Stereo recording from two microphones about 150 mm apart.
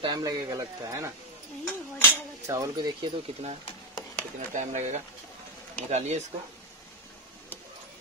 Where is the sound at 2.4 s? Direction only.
20° right (ahead or behind).